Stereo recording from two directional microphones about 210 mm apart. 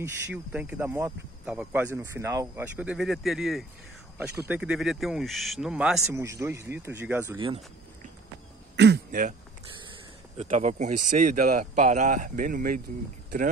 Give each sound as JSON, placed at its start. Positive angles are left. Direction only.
{"t": 0.0, "sound": "speech", "side_deg": -5}
{"t": 7.3, "sound": "speech", "side_deg": -25}
{"t": 8.7, "sound": "speech", "side_deg": -55}
{"t": 10.3, "sound": "speech", "side_deg": -35}